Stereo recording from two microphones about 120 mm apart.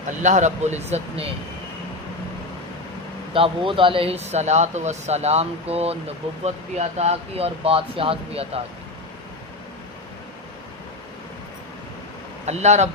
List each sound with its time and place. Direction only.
0.2 s speech: 90° right; by 1.3 s 60° right (ahead or behind)
3.3 s speech: 45° right (ahead or behind)
12.5 s speech: 70° right (ahead or behind)